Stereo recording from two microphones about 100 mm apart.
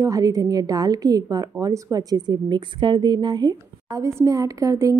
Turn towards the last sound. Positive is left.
turn(degrees=-30)  # may be behind; listen again after turning